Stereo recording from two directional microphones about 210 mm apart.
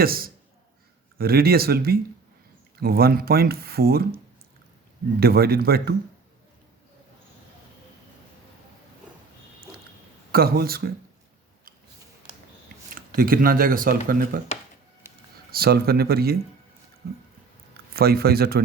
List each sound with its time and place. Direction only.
0.0 s speech: 45° right (ahead or behind)
5.2 s speech: 45° right (ahead or behind)
10.3 s speech: 45° right (ahead or behind)
13.1 s speech: 45° right (ahead or behind)
15.1 s a sound: 10° right (ahead or behind)
15.5 s speech: 45° right (ahead or behind)